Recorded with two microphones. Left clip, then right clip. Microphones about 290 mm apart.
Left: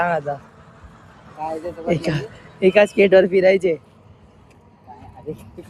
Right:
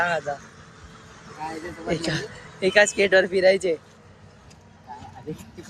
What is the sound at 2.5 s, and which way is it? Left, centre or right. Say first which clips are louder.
Speech: left 4 dB; centre.